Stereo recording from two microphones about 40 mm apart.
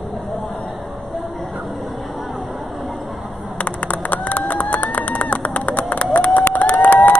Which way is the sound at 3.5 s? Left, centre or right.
Left.